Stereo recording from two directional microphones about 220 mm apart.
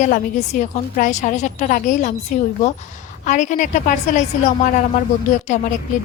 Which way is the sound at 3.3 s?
35° left (ahead or behind).